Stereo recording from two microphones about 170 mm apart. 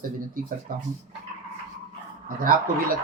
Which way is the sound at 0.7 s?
55° right (ahead or behind).